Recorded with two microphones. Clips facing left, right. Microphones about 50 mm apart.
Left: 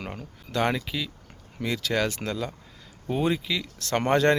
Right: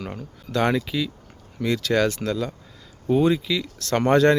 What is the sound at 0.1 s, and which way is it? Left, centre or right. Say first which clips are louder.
Speech: right 4 dB; centre.